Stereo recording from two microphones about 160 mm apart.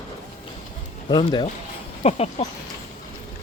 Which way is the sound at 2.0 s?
40° left (ahead or behind).